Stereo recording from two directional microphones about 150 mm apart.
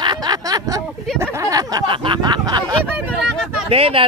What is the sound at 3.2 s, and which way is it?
Speech, centre (ahead or behind).